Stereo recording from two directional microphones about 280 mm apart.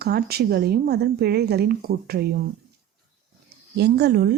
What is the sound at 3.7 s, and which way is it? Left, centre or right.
Speech, right.